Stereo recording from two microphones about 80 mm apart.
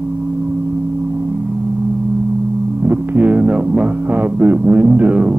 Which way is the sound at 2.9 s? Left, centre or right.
Centre.